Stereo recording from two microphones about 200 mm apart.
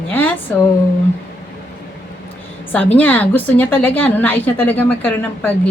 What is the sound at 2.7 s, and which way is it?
A woman's voice, 10° left (ahead or behind).